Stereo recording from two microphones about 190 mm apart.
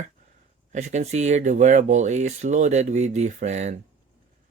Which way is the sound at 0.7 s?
40° right (ahead or behind).